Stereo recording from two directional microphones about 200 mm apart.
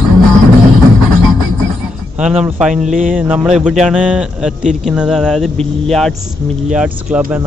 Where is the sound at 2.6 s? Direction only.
5° right (ahead or behind).